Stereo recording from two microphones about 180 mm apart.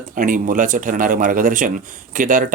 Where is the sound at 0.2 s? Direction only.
45° right (ahead or behind).